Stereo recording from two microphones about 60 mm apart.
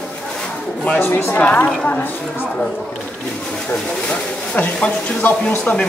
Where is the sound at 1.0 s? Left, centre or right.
Left.